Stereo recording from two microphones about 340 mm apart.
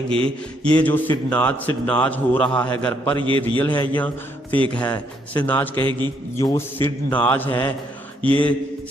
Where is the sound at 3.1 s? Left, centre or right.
Centre.